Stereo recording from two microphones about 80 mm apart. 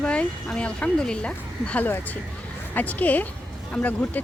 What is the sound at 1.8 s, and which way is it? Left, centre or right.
A woman's voice, left.